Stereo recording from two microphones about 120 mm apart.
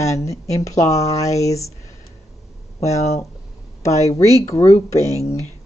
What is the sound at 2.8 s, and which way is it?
Speech, 65° left (ahead or behind).